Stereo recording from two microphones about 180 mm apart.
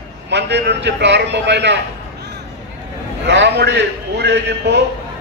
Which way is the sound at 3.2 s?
75° right (ahead or behind).